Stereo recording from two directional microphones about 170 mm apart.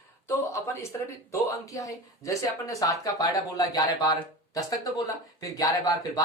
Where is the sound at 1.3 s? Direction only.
20° left (ahead or behind).